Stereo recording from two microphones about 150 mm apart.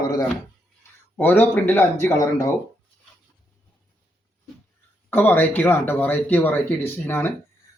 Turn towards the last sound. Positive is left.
turn(degrees=15)  # may be behind; listen again after turning